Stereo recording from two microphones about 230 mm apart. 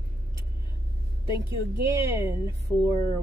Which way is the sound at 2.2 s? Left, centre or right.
Centre.